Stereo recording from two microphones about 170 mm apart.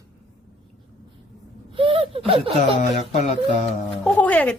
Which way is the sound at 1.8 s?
30° right (ahead or behind).